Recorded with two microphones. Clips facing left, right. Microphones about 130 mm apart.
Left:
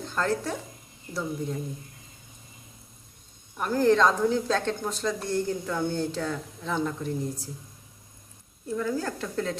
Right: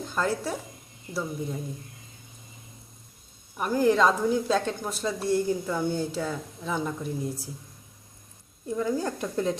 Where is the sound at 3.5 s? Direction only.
10° right (ahead or behind).